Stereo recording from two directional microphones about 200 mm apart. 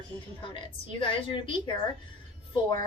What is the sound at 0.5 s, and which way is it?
A woman's voice, 25° left (ahead or behind).